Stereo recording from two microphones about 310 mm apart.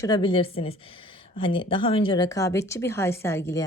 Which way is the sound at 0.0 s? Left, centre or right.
Centre.